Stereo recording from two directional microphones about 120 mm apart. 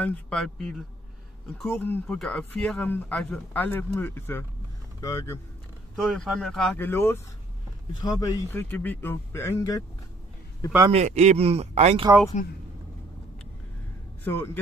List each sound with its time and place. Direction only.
0.0 s speech: 5° left (ahead or behind); by 5.4 s 25° left (ahead or behind)
5.9 s speech: centre (ahead or behind)
6.8 s speech: 20° left (ahead or behind)
8.0 s speech: 30° left (ahead or behind)
8.5 s speech: 15° left (ahead or behind)
10.9 s speech: 65° right (ahead or behind)
14.2 s speech: 15° left (ahead or behind)